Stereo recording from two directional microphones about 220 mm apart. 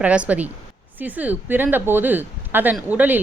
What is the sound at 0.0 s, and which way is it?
A woman's voice, 5° right (ahead or behind).